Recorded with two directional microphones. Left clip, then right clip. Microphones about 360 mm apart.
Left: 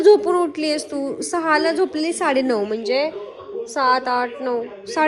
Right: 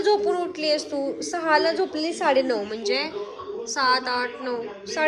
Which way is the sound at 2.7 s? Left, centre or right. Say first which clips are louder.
Left 5 dB; centre.